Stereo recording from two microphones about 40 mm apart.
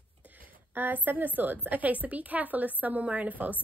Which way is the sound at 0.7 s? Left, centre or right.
Right.